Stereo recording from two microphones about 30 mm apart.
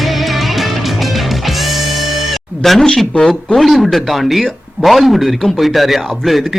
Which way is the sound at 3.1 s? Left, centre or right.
Left.